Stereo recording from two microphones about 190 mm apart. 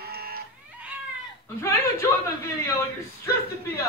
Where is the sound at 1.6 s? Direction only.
15° left (ahead or behind).